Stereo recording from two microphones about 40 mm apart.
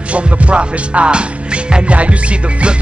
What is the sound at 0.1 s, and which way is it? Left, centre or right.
Music, right.